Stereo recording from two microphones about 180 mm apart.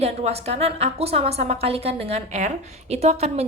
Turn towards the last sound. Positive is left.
turn(degrees=-35)  # may be behind; listen again after turning